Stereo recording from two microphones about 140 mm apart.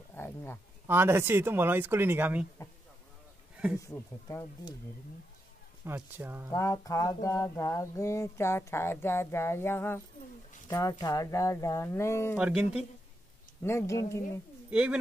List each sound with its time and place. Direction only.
0.1 s speech: 15° left (ahead or behind)
0.8 s speech: 15° right (ahead or behind)
3.7 s speech: 20° left (ahead or behind)
5.9 s speech: 15° right (ahead or behind)
6.5 s speech: 25° left (ahead or behind)
12.4 s speech: 10° right (ahead or behind)
13.6 s speech: 20° left (ahead or behind)
14.7 s speech: 10° right (ahead or behind)